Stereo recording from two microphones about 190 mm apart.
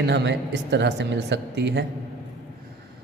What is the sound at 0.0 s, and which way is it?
Speech, 65° right (ahead or behind).